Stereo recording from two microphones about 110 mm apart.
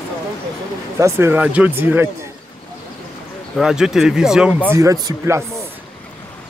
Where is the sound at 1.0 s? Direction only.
20° right (ahead or behind).